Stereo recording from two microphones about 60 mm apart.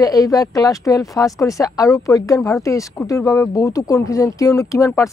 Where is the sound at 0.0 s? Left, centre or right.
Left.